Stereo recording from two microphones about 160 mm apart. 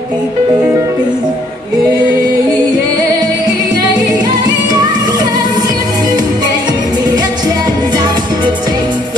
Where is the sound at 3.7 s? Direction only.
25° right (ahead or behind).